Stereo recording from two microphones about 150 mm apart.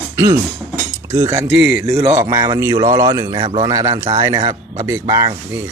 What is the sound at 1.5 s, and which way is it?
Speech, centre (ahead or behind).